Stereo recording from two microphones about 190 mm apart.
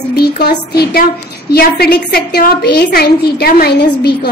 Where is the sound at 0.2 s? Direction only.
55° left (ahead or behind).